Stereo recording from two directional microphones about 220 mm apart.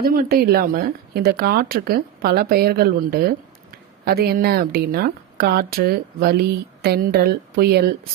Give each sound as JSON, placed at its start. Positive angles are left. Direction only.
{"t": 0.0, "sound": "a woman's voice", "side_deg": -40}